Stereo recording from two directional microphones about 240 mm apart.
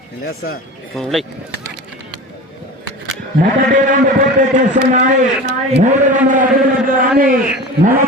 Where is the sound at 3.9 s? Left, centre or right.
Right.